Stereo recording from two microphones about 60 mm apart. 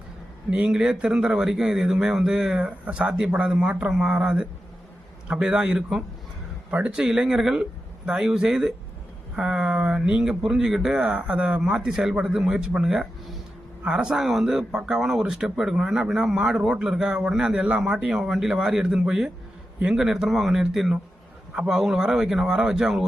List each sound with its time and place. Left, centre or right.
0.5 s speech: centre